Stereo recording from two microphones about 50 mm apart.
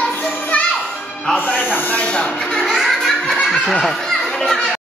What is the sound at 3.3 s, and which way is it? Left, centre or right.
Snicker, centre.